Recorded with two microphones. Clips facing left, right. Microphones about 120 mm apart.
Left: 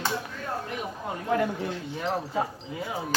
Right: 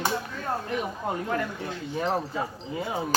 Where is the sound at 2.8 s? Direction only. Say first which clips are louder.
Right 3 dB; 25° right (ahead or behind).